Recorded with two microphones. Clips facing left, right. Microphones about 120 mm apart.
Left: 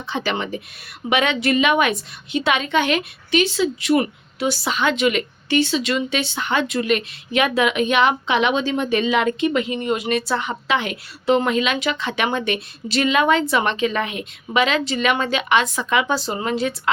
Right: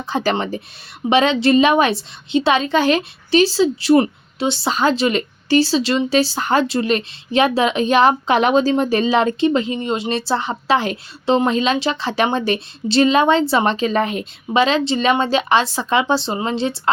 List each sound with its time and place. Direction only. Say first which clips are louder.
0.1 s a woman's voice: right 4 dB; 40° right (ahead or behind)